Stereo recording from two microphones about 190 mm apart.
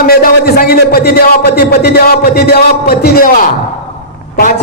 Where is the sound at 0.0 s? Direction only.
50° left (ahead or behind).